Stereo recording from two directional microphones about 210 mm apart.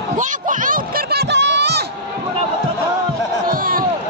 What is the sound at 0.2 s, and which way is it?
Music, 40° right (ahead or behind).